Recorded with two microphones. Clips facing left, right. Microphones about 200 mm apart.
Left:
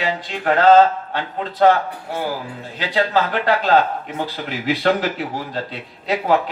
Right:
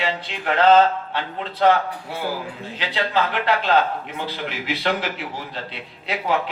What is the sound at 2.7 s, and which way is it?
Speech, 45° left (ahead or behind).